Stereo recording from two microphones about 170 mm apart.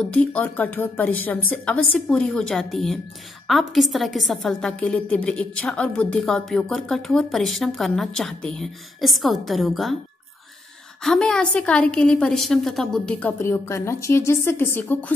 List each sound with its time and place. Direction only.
0.0 s a woman's voice: 10° left (ahead or behind)
11.0 s a woman's voice: 5° left (ahead or behind)